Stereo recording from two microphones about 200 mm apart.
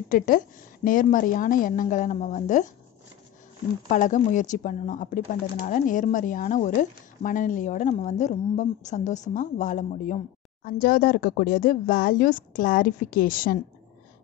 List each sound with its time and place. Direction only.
0.1 s a woman's voice: 40° left (ahead or behind)
3.9 s a woman's voice: 40° left (ahead or behind)